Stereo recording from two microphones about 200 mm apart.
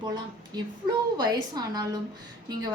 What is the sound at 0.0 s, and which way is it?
Speech, 20° right (ahead or behind).